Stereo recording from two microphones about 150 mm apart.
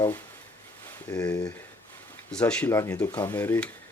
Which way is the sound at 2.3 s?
5° left (ahead or behind).